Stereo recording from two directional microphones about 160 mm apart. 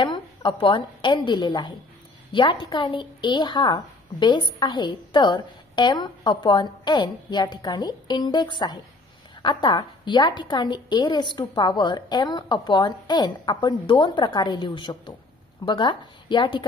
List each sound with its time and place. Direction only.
0.0 s a woman's voice: 30° left (ahead or behind)